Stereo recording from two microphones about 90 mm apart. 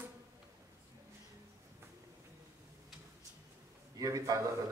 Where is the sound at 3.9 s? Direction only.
40° right (ahead or behind).